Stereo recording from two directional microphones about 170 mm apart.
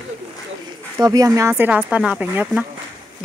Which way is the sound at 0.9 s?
20° right (ahead or behind).